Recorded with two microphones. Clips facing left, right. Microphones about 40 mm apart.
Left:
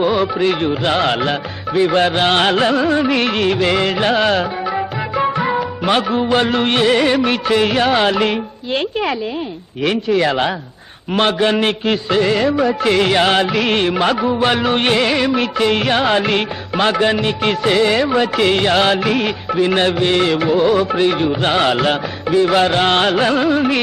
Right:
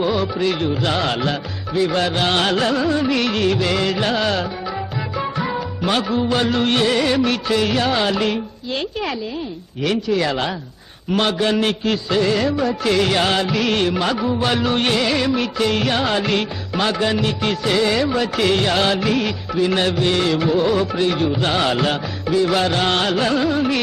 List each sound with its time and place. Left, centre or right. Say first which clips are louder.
0.0 s music: left 4 dB; left